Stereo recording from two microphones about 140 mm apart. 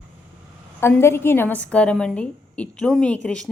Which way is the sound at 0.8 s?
15° left (ahead or behind).